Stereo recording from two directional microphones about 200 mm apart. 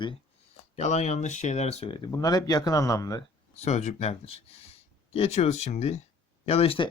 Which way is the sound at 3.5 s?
35° left (ahead or behind).